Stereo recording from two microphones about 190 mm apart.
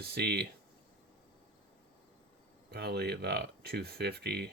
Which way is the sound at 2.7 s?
60° right (ahead or behind).